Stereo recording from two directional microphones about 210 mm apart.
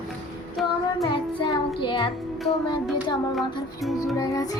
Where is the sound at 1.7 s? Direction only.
25° left (ahead or behind).